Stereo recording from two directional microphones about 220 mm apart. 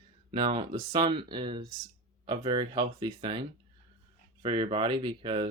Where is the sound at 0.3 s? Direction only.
25° right (ahead or behind).